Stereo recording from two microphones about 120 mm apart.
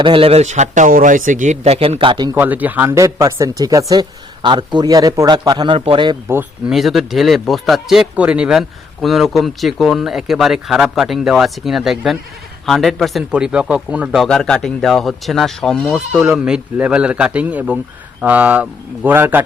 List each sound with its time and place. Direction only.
0.0 s speech: 50° right (ahead or behind)
2.0 s a man's voice: 40° right (ahead or behind)
2.3 s speech: 15° right (ahead or behind)
4.4 s a man's voice: 40° right (ahead or behind)
5.7 s a man's voice: 50° right (ahead or behind)
6.7 s speech: centre (ahead or behind)
14.2 s speech: 5° left (ahead or behind); by 19.4 s 15° right (ahead or behind)